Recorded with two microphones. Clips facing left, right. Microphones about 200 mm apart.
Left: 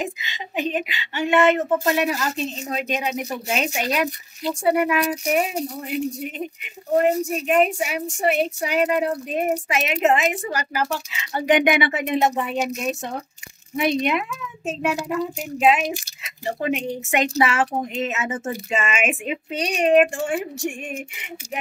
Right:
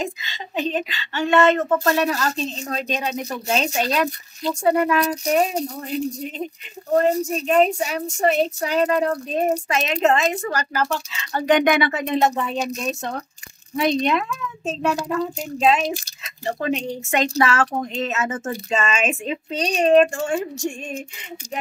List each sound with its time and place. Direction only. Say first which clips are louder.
0.0 s a child's voice: right 1 dB; 15° left (ahead or behind)